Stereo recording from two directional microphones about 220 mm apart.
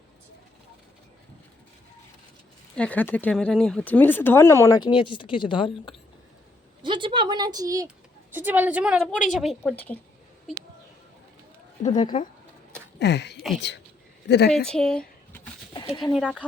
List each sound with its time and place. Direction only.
2.7 s speech: 5° left (ahead or behind); by 5.9 s 20° left (ahead or behind)
6.8 s a woman's voice: 20° right (ahead or behind); by 10.0 s 5° left (ahead or behind)
11.9 s speech: 20° left (ahead or behind)
13.0 s speech: 50° left (ahead or behind)
14.5 s speech: 5° left (ahead or behind)
15.7 s a sound: 20° left (ahead or behind)
16.1 s a woman's voice: 5° left (ahead or behind)